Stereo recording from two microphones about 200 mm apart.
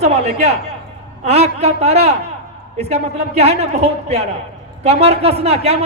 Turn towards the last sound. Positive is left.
turn(degrees=-30)  # may be behind; listen again after turning